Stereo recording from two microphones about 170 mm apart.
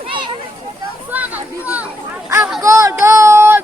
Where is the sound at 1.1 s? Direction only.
10° right (ahead or behind).